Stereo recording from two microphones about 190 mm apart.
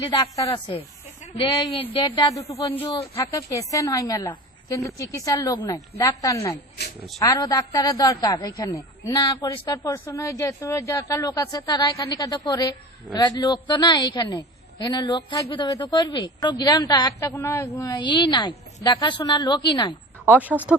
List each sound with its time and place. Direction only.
0.2 s a woman's voice: 25° left (ahead or behind)
20.2 s speech: 10° right (ahead or behind)